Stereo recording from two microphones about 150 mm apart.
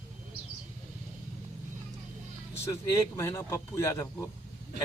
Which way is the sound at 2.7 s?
20° left (ahead or behind).